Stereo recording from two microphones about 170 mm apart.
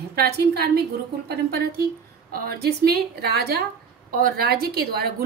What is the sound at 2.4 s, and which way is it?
A woman's voice, 65° right (ahead or behind).